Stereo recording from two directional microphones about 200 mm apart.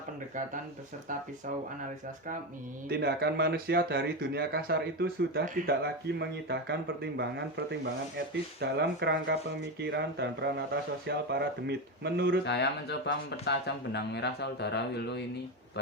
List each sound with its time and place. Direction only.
2.9 s speech: 55° right (ahead or behind)
12.5 s speech: 60° left (ahead or behind)